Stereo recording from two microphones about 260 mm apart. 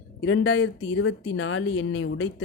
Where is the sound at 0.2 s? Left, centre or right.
Left.